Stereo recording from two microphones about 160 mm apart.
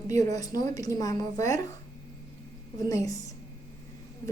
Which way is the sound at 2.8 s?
20° left (ahead or behind).